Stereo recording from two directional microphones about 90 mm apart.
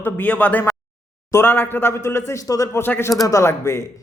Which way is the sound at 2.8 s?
25° left (ahead or behind).